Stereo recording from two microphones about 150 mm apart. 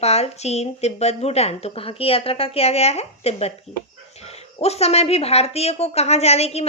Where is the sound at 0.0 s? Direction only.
45° left (ahead or behind).